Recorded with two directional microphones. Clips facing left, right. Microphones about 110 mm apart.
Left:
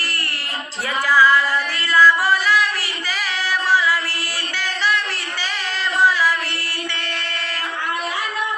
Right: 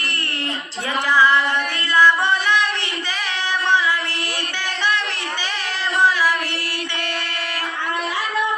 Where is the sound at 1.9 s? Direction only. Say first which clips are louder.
Left 1 dB; 20° right (ahead or behind).